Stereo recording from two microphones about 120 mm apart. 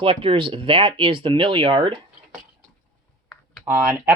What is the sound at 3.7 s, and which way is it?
Speech, 20° right (ahead or behind).